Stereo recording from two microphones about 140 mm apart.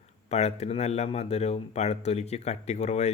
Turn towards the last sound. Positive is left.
turn(degrees=55)  # may be behind; listen again after turning